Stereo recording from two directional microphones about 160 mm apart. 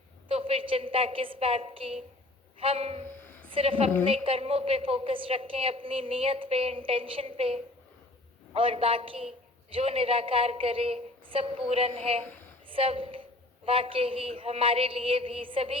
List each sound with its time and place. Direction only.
0.3 s a woman's voice: 35° right (ahead or behind)
3.2 s a sound: 10° left (ahead or behind)
3.5 s a woman's voice: 35° right (ahead or behind)